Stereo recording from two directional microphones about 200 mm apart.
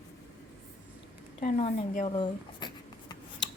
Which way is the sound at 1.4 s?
35° left (ahead or behind).